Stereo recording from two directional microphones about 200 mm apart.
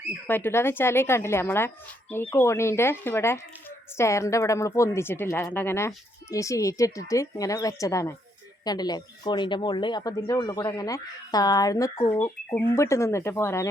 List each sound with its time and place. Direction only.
0.3 s speech: 10° left (ahead or behind)